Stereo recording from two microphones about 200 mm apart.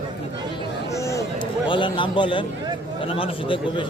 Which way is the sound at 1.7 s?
25° left (ahead or behind).